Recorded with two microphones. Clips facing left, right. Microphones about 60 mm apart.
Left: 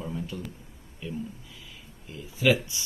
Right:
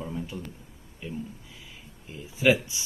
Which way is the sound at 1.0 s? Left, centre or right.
Centre.